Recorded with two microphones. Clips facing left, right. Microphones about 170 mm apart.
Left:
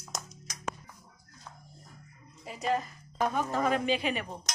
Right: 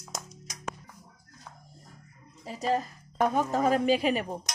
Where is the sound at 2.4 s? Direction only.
35° right (ahead or behind).